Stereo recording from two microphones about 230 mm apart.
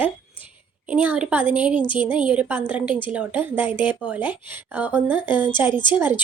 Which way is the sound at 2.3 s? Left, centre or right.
Centre.